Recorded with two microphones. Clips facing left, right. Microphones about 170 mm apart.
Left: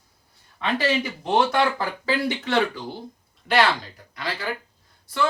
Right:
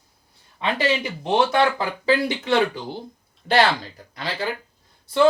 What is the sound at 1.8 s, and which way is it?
Speech, 15° right (ahead or behind).